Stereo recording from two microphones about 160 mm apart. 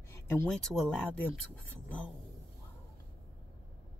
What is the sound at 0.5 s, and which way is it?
Speech, 5° left (ahead or behind).